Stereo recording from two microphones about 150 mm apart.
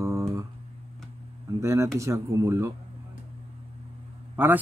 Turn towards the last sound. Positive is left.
turn(degrees=-15)  # may be behind; listen again after turning